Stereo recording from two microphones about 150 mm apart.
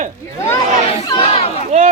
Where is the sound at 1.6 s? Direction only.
55° right (ahead or behind).